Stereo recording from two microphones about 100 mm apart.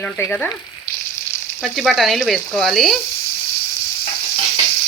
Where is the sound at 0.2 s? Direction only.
15° left (ahead or behind).